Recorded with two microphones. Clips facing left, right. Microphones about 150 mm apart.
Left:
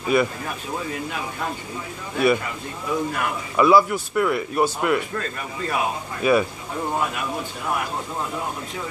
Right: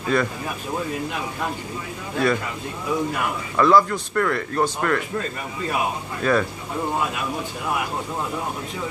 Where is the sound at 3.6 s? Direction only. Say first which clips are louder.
Left 1 dB; 10° left (ahead or behind).